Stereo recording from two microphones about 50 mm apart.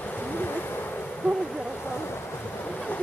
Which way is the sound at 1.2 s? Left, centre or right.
Left.